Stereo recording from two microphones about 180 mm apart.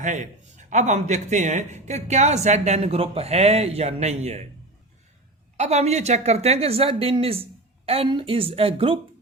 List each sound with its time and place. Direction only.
0.0 s a man's voice: 45° right (ahead or behind)
5.5 s a woman's voice: 40° right (ahead or behind)